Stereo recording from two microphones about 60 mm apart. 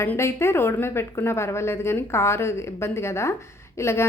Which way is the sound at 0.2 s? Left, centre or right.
Left.